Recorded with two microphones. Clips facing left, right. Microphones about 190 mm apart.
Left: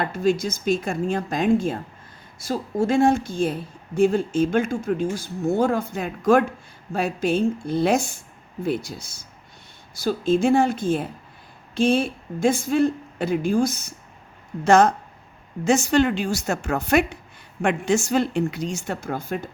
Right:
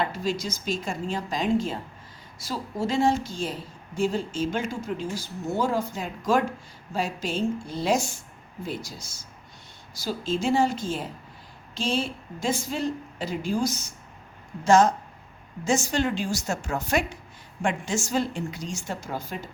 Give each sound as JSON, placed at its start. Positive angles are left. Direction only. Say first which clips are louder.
{"t": 0.0, "sound": "a woman's voice", "louder": "left 6 dB", "side_deg": 55}